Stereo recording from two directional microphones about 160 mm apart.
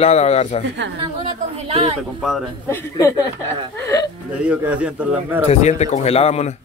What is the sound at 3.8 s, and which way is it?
Speech, 20° left (ahead or behind).